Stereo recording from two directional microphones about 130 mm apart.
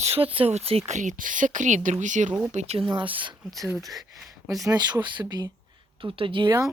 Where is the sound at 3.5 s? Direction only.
25° right (ahead or behind).